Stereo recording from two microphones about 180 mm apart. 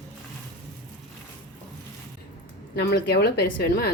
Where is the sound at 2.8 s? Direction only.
65° left (ahead or behind).